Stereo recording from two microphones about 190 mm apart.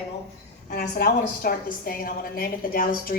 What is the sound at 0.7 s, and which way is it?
A woman's voice, 55° left (ahead or behind).